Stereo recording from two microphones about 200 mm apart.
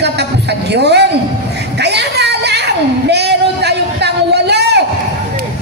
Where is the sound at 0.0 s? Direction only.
55° right (ahead or behind).